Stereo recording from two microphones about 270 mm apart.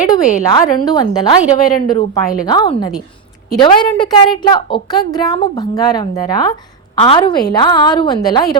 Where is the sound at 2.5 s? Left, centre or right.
Centre.